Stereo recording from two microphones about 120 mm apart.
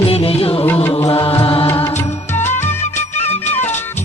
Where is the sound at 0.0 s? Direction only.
50° left (ahead or behind).